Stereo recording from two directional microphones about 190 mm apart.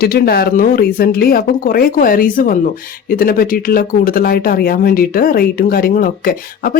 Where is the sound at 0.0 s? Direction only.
50° left (ahead or behind).